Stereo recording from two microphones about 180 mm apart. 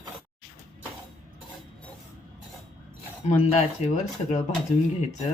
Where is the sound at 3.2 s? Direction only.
40° left (ahead or behind).